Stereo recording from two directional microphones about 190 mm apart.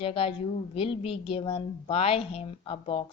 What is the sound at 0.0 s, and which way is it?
A woman's voice, 30° left (ahead or behind).